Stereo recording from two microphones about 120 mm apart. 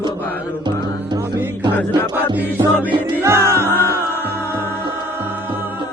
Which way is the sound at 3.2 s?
20° right (ahead or behind).